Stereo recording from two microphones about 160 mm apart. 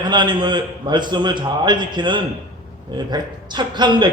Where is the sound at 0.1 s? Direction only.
30° right (ahead or behind).